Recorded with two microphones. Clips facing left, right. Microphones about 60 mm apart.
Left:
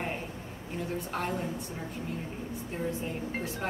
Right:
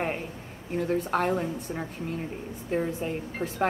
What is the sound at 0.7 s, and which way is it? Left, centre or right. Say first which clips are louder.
A woman's voice: right 8 dB; right.